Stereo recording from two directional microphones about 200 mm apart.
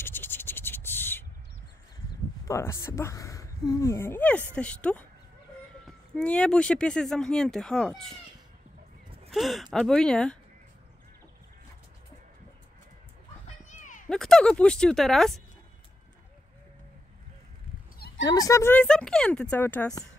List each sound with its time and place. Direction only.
0.0 s scratch: 10° left (ahead or behind)
2.4 s speech: 15° left (ahead or behind)
6.1 s speech: 5° left (ahead or behind)
9.3 s speech: centre (ahead or behind)
13.7 s a sound: 40° left (ahead or behind)
14.0 s speech: 5° left (ahead or behind)
17.9 s a sound: 55° left (ahead or behind)
18.2 s speech: 20° left (ahead or behind)